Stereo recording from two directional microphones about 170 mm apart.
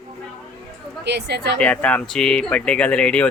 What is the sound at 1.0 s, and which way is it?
Speech, 80° right.